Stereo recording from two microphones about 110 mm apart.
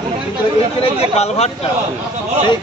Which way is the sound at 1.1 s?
80° left.